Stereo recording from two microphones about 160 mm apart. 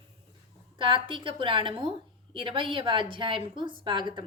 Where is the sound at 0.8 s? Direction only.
30° right (ahead or behind).